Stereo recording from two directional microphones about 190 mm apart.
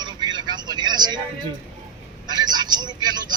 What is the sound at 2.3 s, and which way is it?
Speech, 20° right (ahead or behind).